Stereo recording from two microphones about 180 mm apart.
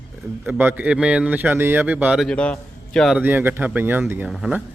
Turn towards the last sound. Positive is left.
turn(degrees=-5)  # may be behind; listen again after turning